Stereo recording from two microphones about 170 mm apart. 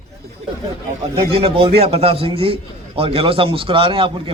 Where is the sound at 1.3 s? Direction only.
35° right (ahead or behind).